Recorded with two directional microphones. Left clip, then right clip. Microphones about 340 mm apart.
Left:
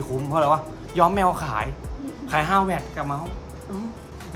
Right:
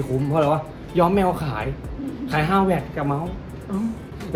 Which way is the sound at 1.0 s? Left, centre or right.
Centre.